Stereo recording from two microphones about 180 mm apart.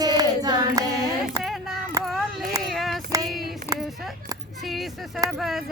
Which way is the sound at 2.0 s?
20° right (ahead or behind).